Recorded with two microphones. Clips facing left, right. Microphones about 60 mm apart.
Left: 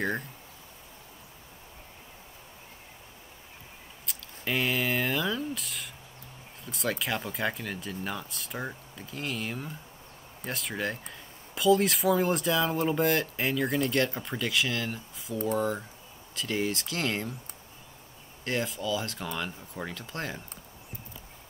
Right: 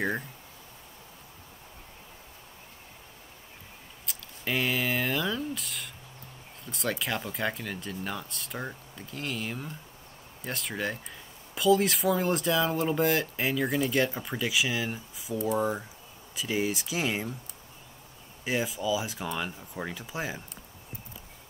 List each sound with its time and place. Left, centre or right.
0.0 s speech: centre
4.0 s a sound: centre
6.6 s speech: centre
18.4 s speech: centre